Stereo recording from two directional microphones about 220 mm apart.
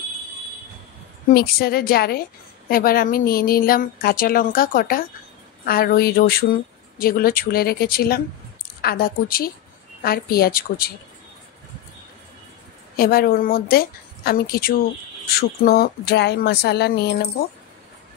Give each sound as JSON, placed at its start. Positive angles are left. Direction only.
{"t": 1.3, "sound": "a woman's voice", "side_deg": 45}
{"t": 12.9, "sound": "speech", "side_deg": 45}